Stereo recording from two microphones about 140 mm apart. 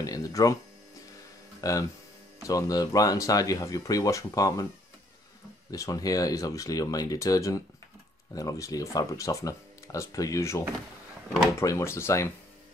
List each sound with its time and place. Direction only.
0.0 s speech: 25° left (ahead or behind)
1.6 s speech: 25° left (ahead or behind)
5.7 s speech: 25° left (ahead or behind)
11.6 s speech: 20° left (ahead or behind)